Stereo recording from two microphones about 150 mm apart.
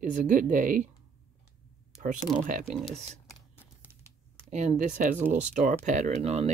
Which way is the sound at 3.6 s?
10° right (ahead or behind).